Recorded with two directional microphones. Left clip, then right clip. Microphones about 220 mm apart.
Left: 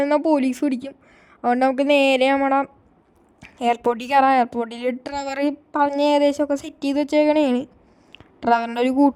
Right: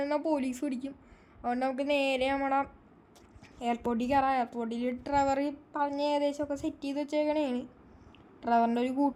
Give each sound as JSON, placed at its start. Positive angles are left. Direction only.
{"t": 0.0, "sound": "a woman's voice", "side_deg": 45}